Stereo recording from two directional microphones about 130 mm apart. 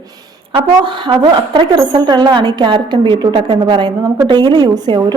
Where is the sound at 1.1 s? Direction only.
35° right (ahead or behind).